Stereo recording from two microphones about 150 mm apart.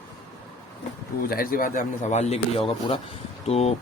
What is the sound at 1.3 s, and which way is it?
A man's voice, 80° left.